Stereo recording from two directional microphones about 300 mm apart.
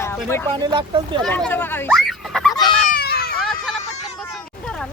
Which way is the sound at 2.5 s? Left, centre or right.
Centre.